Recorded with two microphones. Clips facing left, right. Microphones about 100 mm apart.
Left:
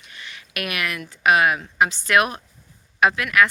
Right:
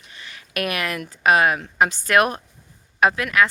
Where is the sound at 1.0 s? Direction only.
40° right (ahead or behind).